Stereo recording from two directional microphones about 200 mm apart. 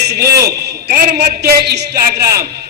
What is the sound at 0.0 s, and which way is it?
A man's voice, 55° right (ahead or behind).